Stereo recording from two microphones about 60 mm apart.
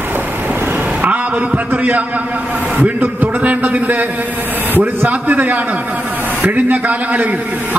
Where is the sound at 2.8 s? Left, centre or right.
Right.